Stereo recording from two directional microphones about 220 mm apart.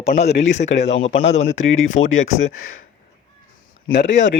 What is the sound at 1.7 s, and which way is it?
Speech, 65° left (ahead or behind).